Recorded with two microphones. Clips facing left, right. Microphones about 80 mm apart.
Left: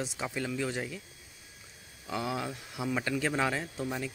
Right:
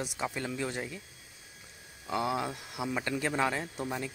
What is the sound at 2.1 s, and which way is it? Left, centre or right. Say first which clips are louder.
Speech: right 3 dB; centre.